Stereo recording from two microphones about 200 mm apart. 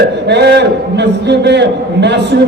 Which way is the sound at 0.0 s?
60° right (ahead or behind).